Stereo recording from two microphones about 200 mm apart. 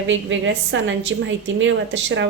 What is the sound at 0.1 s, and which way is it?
A woman's voice, 65° right (ahead or behind).